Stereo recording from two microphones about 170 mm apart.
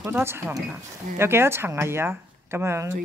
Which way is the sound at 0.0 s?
15° right (ahead or behind).